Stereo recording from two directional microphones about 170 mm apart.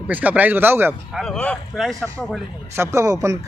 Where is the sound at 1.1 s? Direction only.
5° left (ahead or behind).